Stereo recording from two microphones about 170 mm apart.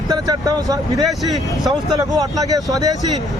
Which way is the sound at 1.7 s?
20° right (ahead or behind).